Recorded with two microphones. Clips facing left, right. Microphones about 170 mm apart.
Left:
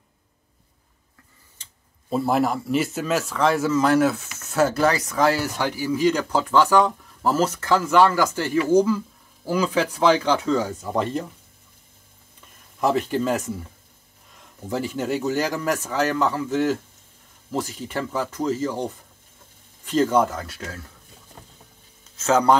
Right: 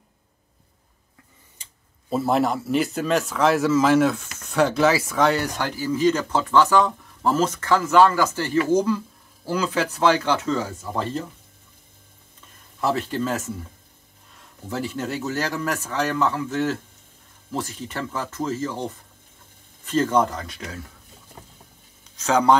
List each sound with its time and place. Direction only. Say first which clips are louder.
2.0 s speech: even; centre (ahead or behind); by 11.2 s 20° left (ahead or behind)
12.8 s speech: left 3 dB; 15° left (ahead or behind)
14.7 s speech: left 3 dB; 10° left (ahead or behind)
19.9 s speech: left 1 dB; 10° left (ahead or behind)
22.1 s speech: even; 5° left (ahead or behind)